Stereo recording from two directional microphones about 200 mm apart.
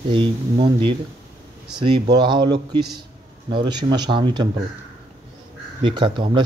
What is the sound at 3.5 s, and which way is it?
Speech, 20° right (ahead or behind).